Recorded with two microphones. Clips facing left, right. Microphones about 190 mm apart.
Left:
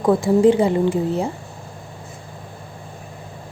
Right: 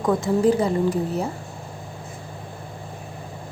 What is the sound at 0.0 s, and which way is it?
A woman's voice, 30° left (ahead or behind).